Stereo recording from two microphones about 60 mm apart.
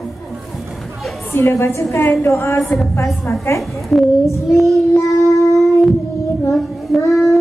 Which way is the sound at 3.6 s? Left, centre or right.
Centre.